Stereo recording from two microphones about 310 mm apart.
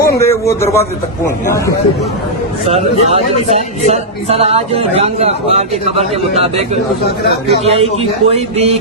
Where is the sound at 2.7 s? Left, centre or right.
Centre.